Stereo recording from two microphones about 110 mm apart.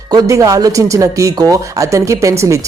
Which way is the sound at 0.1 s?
30° right (ahead or behind).